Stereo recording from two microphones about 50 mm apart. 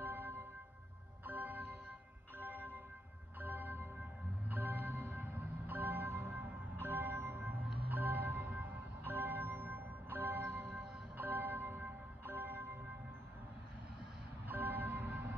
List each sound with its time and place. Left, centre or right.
0.0 s music: right
7.5 s music: right
14.5 s music: right